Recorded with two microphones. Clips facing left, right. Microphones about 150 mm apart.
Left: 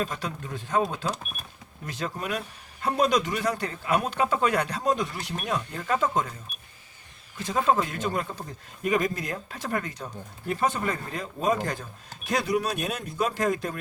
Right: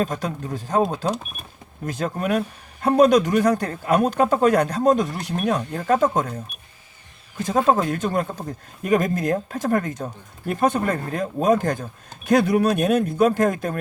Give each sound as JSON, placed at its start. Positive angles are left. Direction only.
{"t": 0.0, "sound": "a man's voice", "side_deg": -45}
{"t": 7.4, "sound": "a man's voice", "side_deg": -45}